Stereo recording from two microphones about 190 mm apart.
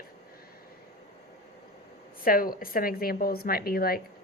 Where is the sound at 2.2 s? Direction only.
50° left (ahead or behind).